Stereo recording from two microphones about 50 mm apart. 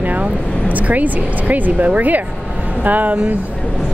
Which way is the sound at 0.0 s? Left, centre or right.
Right.